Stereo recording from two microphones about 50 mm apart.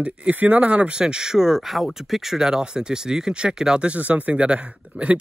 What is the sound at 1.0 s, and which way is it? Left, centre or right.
Speech, centre.